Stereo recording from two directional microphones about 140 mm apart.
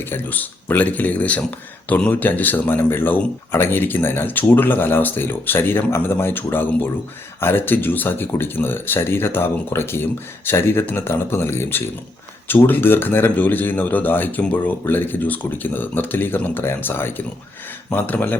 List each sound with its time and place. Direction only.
0.0 s speech: 15° left (ahead or behind)